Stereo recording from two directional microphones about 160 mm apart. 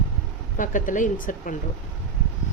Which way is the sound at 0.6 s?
55° left (ahead or behind).